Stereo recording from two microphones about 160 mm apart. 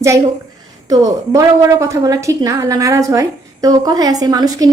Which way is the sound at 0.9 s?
20° right (ahead or behind).